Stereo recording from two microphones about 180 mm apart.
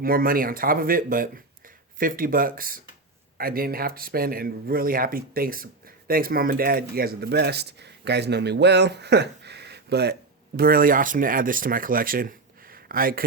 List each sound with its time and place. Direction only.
0.0 s speech: 55° right (ahead or behind)
10.6 s speech: 55° right (ahead or behind)